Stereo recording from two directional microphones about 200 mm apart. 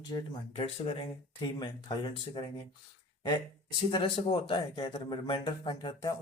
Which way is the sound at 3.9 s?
25° left (ahead or behind).